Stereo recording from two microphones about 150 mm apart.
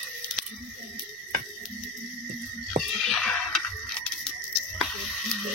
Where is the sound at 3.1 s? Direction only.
5° left (ahead or behind).